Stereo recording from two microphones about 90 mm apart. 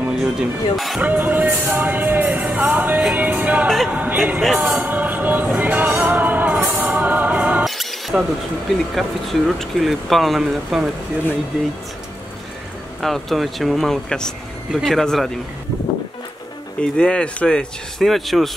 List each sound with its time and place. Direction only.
0.1 s speech: 5° right (ahead or behind)
1.0 s music: 20° right (ahead or behind)
3.2 s speech: 15° right (ahead or behind)
3.6 s speech: centre (ahead or behind)
3.9 s speech: 15° right (ahead or behind)
4.4 s speech: centre (ahead or behind)
4.8 s music: 20° right (ahead or behind)
7.6 s mouse: centre (ahead or behind)
8.9 s speech: centre (ahead or behind)
13.0 s speech: centre (ahead or behind)
16.8 s speech: 10° left (ahead or behind)